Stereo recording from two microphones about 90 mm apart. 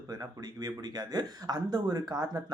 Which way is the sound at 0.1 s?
45° right (ahead or behind).